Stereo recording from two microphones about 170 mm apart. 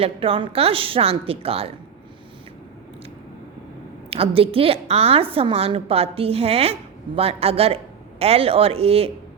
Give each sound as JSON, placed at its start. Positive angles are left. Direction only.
{"t": 0.0, "sound": "a woman's voice", "side_deg": -35}
{"t": 4.1, "sound": "a woman's voice", "side_deg": -35}